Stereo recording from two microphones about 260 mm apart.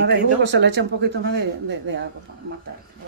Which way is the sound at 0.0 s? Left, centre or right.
Right.